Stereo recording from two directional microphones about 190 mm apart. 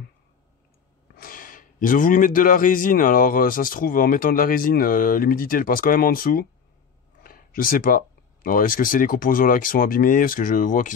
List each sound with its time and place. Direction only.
1.1 s speech: 50° left (ahead or behind)